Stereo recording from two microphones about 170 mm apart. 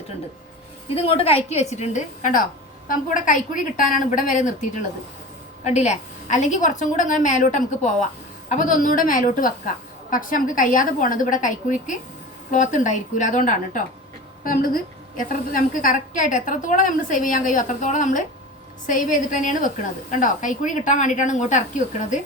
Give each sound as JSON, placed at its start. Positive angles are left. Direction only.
{"t": 0.9, "sound": "a woman's voice", "side_deg": 35}